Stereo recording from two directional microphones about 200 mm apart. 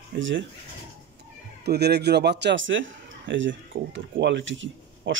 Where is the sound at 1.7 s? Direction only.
55° right (ahead or behind).